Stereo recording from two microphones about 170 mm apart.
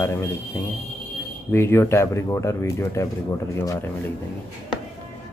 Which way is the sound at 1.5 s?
15° left (ahead or behind).